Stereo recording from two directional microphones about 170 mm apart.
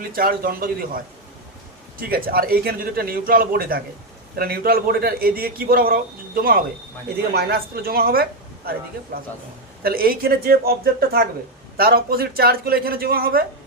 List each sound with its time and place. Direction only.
0.1 s a man's voice: 60° right (ahead or behind)
9.8 s a man's voice: 60° right (ahead or behind)